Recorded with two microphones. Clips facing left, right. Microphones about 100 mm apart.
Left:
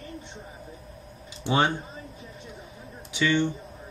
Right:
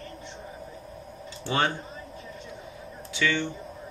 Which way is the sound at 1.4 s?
15° left (ahead or behind).